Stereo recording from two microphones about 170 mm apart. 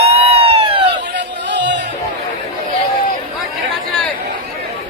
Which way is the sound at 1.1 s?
90° right.